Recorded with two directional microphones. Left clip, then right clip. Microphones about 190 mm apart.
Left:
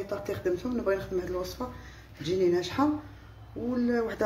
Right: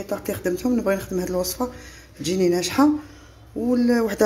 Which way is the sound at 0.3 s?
50° right (ahead or behind).